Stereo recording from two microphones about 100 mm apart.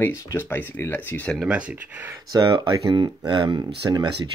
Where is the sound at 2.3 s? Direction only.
45° right (ahead or behind).